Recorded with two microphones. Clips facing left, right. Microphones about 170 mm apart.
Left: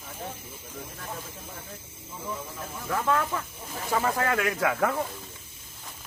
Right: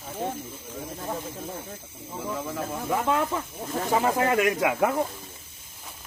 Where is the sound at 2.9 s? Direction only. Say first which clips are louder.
Right 1 dB; 20° right (ahead or behind).